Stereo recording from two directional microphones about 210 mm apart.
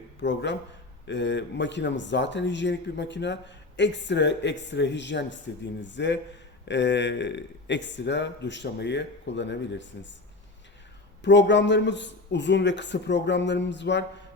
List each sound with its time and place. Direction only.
0.2 s a man's voice: 60° left (ahead or behind)
11.2 s a man's voice: 55° left (ahead or behind)